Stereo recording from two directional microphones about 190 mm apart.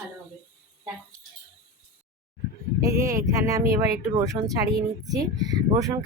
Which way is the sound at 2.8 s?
15° right (ahead or behind).